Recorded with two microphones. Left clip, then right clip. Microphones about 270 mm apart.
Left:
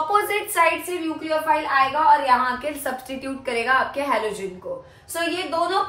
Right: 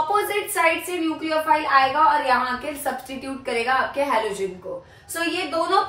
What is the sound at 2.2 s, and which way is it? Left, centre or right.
A woman's voice, centre.